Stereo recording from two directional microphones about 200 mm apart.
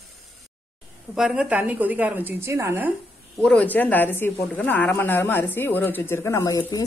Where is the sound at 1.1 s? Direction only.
5° right (ahead or behind).